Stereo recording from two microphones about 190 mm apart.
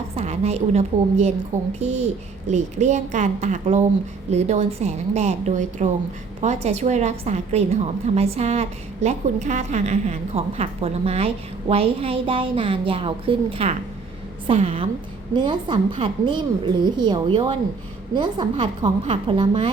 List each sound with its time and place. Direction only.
0.2 s a woman's voice: 35° right (ahead or behind)